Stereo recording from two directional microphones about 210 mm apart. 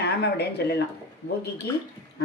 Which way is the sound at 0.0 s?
50° left (ahead or behind).